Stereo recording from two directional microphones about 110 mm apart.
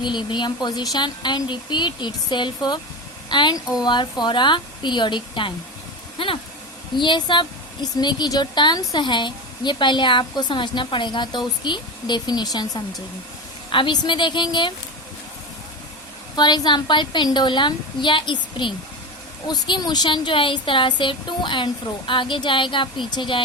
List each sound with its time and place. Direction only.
0.0 s a woman's voice: 45° left (ahead or behind)
6.1 s vehicle: 55° left (ahead or behind)
6.9 s a woman's voice: 45° left (ahead or behind)
13.7 s a woman's voice: 50° left (ahead or behind)
16.3 s a woman's voice: 40° left (ahead or behind)